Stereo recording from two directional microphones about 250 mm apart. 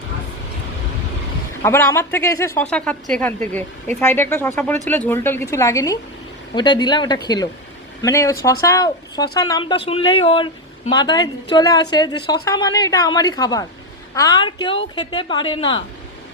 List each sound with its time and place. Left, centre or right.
1.6 s a woman's voice: centre